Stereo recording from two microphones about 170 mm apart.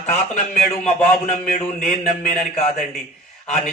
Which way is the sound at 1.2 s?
45° left (ahead or behind).